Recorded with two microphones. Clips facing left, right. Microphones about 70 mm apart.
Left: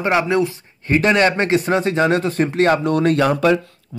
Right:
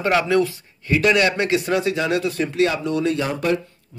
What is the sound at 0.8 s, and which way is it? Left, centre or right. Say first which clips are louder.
A man's voice: left 2 dB; left.